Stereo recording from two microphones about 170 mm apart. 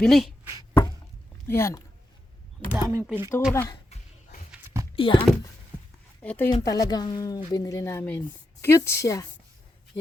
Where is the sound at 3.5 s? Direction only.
15° left (ahead or behind).